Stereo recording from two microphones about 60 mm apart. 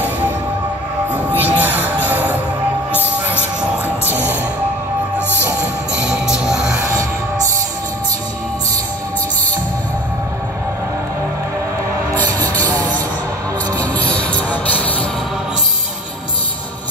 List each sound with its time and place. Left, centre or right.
1.1 s music: right
5.9 s music: centre
12.4 s a sound: left
13.7 s music: left